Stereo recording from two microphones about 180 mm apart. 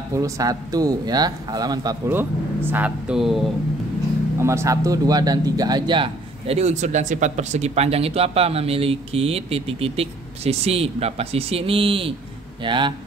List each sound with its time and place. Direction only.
0.1 s speech: 20° right (ahead or behind); by 3.4 s centre (ahead or behind)
4.4 s speech: 15° right (ahead or behind)